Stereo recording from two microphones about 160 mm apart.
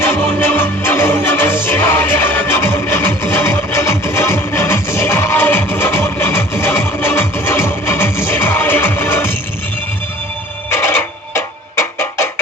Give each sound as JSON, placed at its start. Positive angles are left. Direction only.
{"t": 0.0, "sound": "music", "side_deg": 15}
{"t": 10.7, "sound": "music", "side_deg": 15}